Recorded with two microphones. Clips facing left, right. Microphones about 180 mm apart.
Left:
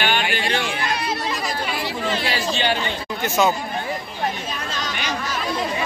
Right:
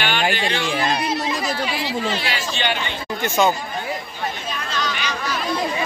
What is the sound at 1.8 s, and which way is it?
Chatter, 50° left (ahead or behind).